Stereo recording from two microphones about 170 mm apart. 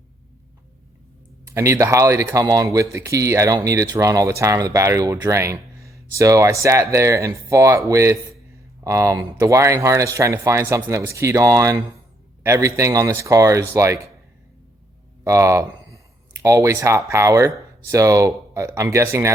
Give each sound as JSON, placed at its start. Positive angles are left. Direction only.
{"t": 1.5, "sound": "speech", "side_deg": -15}
{"t": 15.2, "sound": "speech", "side_deg": -15}